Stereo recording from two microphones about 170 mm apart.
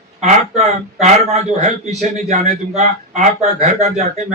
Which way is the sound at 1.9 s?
40° right (ahead or behind).